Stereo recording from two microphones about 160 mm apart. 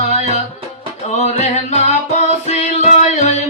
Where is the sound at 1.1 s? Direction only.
45° left (ahead or behind).